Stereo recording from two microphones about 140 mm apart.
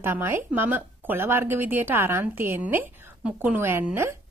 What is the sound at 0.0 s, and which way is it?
A woman's voice, 15° right (ahead or behind).